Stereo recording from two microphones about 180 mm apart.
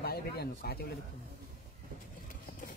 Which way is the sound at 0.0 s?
60° left (ahead or behind).